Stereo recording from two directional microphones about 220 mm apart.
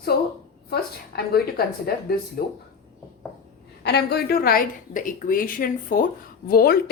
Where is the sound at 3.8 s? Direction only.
45° left (ahead or behind).